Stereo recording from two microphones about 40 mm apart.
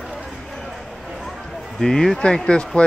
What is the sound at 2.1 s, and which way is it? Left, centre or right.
Speech, left.